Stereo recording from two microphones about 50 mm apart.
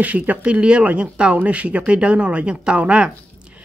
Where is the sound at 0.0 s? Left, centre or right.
Right.